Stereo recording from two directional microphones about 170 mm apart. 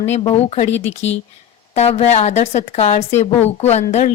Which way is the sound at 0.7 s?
90° left.